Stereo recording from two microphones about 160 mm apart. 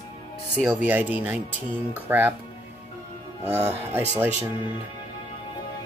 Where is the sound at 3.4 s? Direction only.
15° right (ahead or behind).